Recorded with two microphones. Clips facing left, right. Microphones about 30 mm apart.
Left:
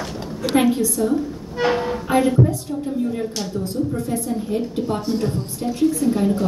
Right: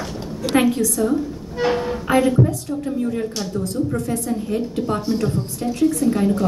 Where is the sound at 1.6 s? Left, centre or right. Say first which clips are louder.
Even; left.